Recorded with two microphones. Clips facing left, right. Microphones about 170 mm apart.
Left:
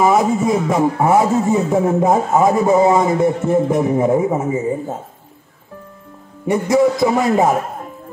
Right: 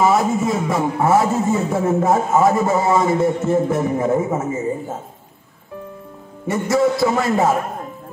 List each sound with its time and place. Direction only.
0.0 s a man's voice: 15° left (ahead or behind)
6.4 s a man's voice: 15° left (ahead or behind)